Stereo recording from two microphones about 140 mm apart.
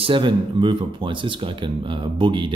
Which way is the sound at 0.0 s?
35° right (ahead or behind).